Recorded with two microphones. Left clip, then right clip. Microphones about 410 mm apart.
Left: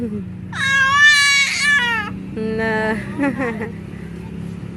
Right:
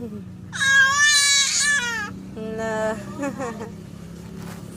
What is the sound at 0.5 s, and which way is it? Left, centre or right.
Baby cry, right.